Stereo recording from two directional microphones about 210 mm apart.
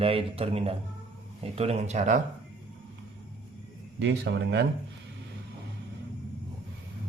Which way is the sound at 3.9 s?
55° right (ahead or behind).